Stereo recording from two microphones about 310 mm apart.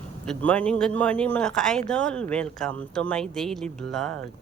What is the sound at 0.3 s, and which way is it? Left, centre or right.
A woman's voice, centre.